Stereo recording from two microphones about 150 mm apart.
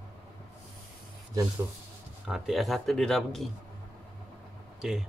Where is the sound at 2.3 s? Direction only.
Centre (ahead or behind).